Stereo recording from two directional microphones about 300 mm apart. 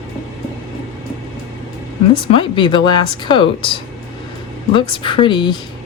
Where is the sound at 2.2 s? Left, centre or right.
Centre.